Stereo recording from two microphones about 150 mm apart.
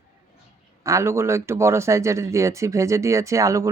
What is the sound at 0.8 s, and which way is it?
Speech, 20° right (ahead or behind).